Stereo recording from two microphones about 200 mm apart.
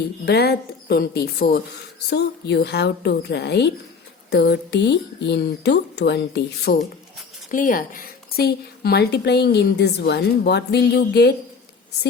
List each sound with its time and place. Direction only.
0.3 s a woman's voice: 50° left (ahead or behind)
7.5 s a woman's voice: 40° left (ahead or behind)